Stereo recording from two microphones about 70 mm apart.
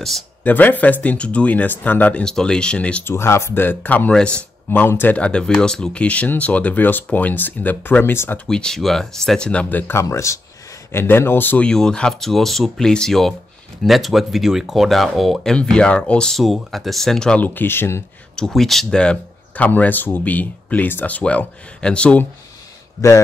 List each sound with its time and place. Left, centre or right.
0.4 s speech: left
2.2 s speech: centre
3.1 s speech: left
5.1 s speech: centre
8.0 s speech: left
8.5 s speech: centre; by 10.0 s left
10.0 s speech: left
10.9 s speech: left
11.6 s speech: centre
15.5 s speech: centre
16.3 s speech: centre
17.4 s speech: left
18.3 s speech: centre
22.9 s speech: left